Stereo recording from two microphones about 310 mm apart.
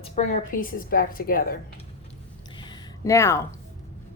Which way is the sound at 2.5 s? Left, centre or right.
Centre.